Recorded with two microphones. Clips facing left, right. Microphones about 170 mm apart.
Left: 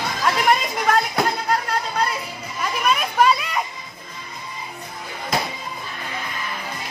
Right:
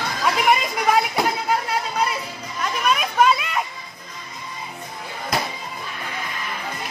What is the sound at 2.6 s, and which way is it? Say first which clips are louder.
Children playing: even; centre (ahead or behind).